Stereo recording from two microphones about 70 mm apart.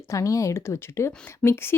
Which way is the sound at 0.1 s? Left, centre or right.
Left.